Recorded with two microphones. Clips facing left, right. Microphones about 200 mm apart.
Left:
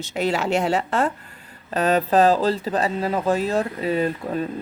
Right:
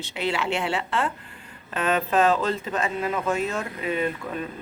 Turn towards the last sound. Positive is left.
turn(degrees=35)  # may be behind; listen again after turning